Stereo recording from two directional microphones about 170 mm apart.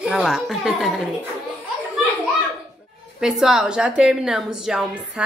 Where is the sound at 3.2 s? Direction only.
5° right (ahead or behind).